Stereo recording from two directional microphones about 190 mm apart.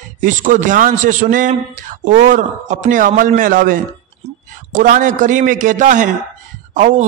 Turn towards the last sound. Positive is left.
turn(degrees=-40)  # may be behind; listen again after turning